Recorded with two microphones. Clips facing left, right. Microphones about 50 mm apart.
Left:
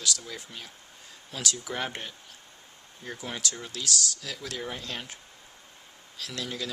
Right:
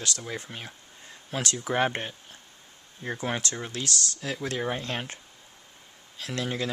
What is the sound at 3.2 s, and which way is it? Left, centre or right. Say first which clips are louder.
Speech: right 4 dB; right.